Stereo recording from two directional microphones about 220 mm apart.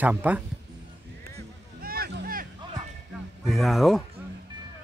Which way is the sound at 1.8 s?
45° right (ahead or behind).